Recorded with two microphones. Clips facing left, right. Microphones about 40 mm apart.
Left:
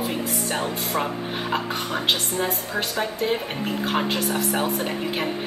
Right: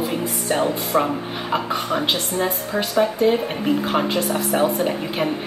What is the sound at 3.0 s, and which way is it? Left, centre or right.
Speech, centre.